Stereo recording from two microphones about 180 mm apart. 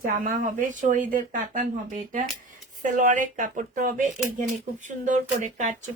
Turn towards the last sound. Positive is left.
turn(degrees=-45)  # may be behind; listen again after turning